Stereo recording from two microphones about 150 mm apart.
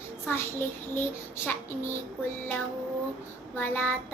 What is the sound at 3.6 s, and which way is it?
Speech, 15° left (ahead or behind).